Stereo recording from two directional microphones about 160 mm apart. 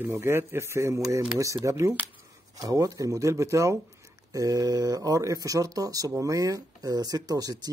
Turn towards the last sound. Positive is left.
turn(degrees=-25)  # may be behind; listen again after turning